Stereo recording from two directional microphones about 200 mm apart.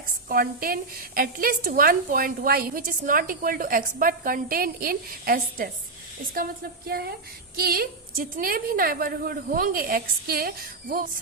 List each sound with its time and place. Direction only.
0.3 s a woman's voice: 45° right (ahead or behind)